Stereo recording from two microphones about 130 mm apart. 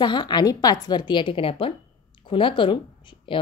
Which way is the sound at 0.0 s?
35° left (ahead or behind).